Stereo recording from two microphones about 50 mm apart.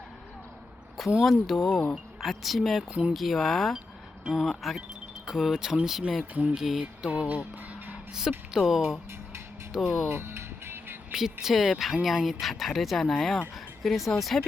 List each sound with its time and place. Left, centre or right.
1.2 s speech: centre
7.1 s speech: right
8.5 s speech: centre
9.8 s music: right
11.1 s speech: centre